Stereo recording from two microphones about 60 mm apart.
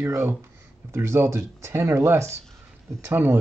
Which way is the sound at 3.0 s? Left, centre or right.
Right.